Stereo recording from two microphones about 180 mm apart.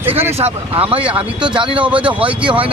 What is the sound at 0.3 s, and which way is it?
Speech, 35° right (ahead or behind).